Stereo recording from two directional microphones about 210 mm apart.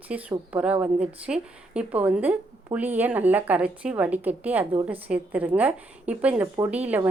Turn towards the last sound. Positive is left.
turn(degrees=-5)  # may be behind; listen again after turning